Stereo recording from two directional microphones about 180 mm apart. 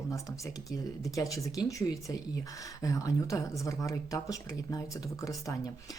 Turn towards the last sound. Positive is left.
turn(degrees=20)  # may be behind; listen again after turning